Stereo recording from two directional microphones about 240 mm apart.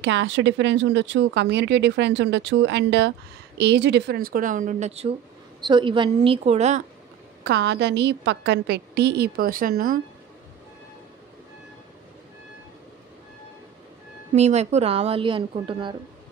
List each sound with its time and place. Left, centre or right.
0.0 s a woman's voice: right
7.4 s speech: right
14.3 s a woman's voice: right